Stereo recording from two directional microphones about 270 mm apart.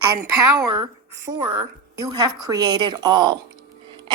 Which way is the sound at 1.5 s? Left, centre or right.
Centre.